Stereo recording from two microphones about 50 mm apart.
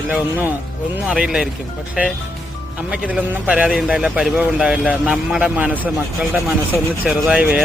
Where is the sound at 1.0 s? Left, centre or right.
Right.